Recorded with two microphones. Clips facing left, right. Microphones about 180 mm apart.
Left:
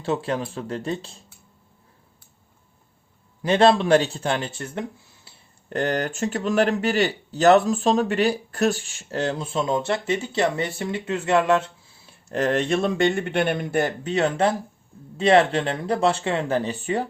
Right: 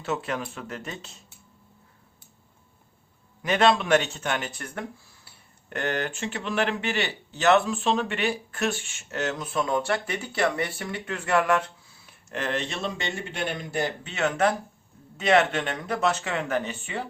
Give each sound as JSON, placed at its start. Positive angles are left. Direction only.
{"t": 0.0, "sound": "speech", "side_deg": 30}
{"t": 3.4, "sound": "speech", "side_deg": 30}
{"t": 5.7, "sound": "speech", "side_deg": 35}
{"t": 12.4, "sound": "speech", "side_deg": 50}
{"t": 14.1, "sound": "speech", "side_deg": 35}